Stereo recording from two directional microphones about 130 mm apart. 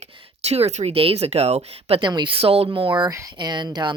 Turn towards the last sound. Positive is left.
turn(degrees=-35)  # may be behind; listen again after turning